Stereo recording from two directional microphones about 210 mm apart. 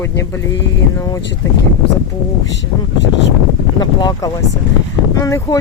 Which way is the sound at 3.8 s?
20° left (ahead or behind).